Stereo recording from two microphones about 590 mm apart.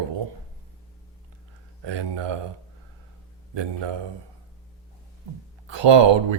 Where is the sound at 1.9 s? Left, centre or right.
Right.